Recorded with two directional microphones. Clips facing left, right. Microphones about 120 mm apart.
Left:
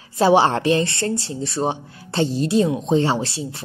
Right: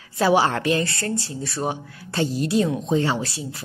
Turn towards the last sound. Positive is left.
turn(degrees=30)  # may be behind; listen again after turning